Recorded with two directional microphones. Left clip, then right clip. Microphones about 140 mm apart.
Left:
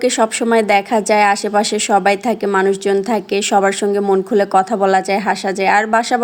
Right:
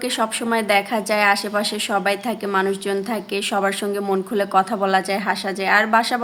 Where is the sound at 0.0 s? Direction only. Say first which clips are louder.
Left 7 dB; 50° left (ahead or behind).